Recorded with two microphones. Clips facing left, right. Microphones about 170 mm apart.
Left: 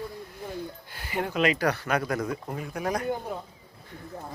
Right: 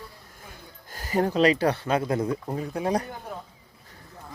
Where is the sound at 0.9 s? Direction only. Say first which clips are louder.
Right 7 dB; 40° right (ahead or behind).